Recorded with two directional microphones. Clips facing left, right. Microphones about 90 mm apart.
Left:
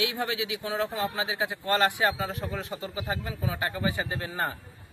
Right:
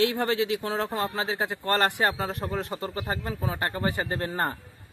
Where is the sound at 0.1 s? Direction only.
50° right (ahead or behind).